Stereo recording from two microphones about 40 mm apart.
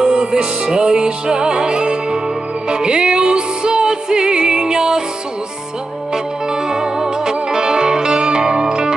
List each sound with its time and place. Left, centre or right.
0.0 s music: centre
6.1 s music: centre